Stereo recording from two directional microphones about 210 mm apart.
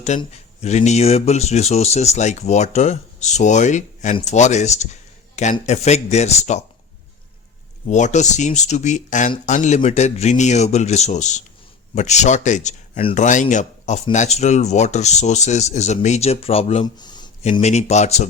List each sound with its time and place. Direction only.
0.0 s speech: 30° left (ahead or behind)
7.9 s speech: 35° left (ahead or behind); by 17.2 s 20° left (ahead or behind)
17.4 s speech: 35° left (ahead or behind)